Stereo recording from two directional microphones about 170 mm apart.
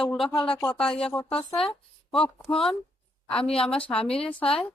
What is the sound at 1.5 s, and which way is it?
Speech, 5° left (ahead or behind).